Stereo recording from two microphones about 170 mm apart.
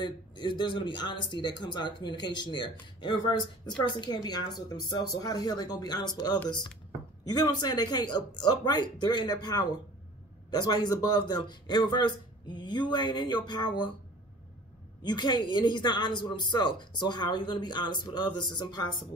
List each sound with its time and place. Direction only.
0.0 s speech: 30° left (ahead or behind)
15.0 s speech: 25° left (ahead or behind)